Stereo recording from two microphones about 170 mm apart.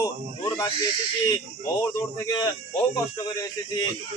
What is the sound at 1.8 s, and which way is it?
Speech, 20° left (ahead or behind).